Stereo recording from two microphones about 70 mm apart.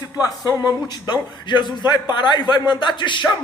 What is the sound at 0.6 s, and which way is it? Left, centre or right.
A man's voice, left.